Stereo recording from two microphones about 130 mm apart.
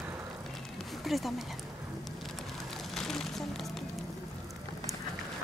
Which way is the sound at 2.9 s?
5° left (ahead or behind).